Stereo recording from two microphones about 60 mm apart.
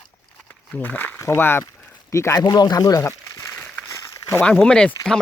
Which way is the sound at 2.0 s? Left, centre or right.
Left.